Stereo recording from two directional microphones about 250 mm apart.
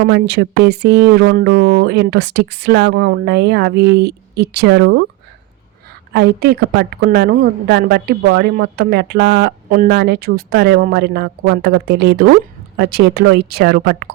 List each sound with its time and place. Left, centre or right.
0.0 s a woman's voice: right
6.1 s a woman's voice: right